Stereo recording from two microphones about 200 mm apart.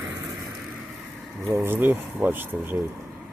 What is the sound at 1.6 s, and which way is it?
Speech, 10° right (ahead or behind).